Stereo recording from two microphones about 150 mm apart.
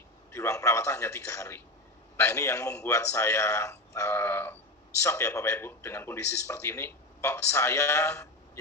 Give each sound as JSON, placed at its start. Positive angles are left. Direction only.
{"t": 0.3, "sound": "a man's voice", "side_deg": 20}